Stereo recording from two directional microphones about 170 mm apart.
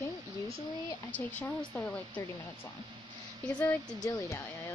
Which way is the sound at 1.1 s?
10° left (ahead or behind).